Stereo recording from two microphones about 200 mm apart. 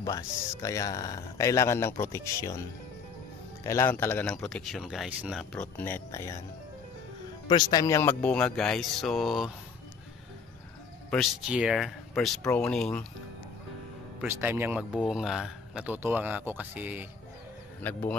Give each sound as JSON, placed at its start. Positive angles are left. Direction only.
{"t": 0.0, "sound": "speech", "side_deg": 15}
{"t": 3.6, "sound": "speech", "side_deg": 15}
{"t": 7.4, "sound": "speech", "side_deg": 20}
{"t": 11.1, "sound": "speech", "side_deg": 0}
{"t": 14.2, "sound": "speech", "side_deg": -10}